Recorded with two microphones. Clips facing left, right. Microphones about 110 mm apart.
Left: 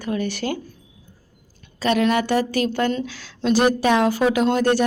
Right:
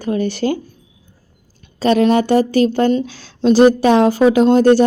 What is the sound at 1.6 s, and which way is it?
A woman's voice, 30° right (ahead or behind).